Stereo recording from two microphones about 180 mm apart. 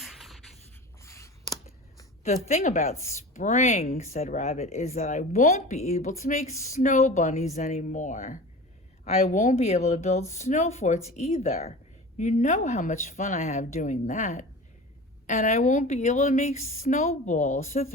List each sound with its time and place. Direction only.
0.0 s writing: centre (ahead or behind)
1.0 s a sound: 15° left (ahead or behind)
2.2 s speech: 40° left (ahead or behind)